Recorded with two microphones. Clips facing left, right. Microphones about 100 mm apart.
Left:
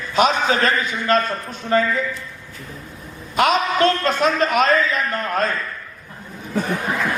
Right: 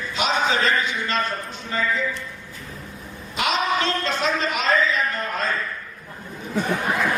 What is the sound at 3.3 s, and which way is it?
A man's voice, 50° left (ahead or behind).